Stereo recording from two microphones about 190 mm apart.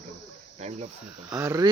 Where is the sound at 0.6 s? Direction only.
35° right (ahead or behind).